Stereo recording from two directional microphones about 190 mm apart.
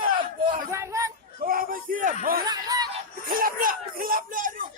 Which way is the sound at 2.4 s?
20° right (ahead or behind).